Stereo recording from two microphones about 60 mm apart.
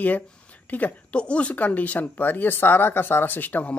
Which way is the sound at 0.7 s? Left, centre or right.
Left.